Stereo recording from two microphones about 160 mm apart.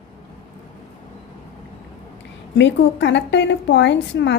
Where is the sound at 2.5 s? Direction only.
90° left.